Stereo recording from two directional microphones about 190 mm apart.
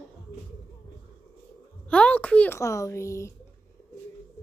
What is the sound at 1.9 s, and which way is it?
A child's voice, 5° left (ahead or behind).